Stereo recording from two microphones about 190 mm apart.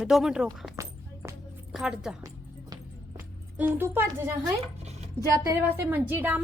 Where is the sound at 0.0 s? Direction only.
Centre (ahead or behind).